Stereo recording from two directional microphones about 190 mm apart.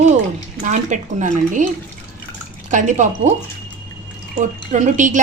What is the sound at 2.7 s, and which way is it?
Speech, 40° right (ahead or behind).